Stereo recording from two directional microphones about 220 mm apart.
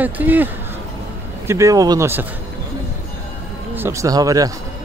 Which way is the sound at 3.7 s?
10° right (ahead or behind).